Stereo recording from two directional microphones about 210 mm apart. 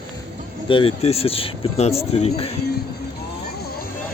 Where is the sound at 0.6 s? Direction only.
25° left (ahead or behind).